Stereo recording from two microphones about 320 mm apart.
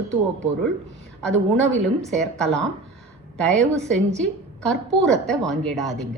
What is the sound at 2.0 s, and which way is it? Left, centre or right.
A woman's voice, centre.